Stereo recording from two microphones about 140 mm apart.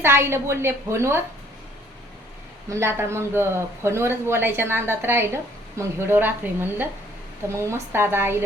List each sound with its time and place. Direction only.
0.0 s speech: 20° right (ahead or behind)
2.6 s speech: 20° right (ahead or behind)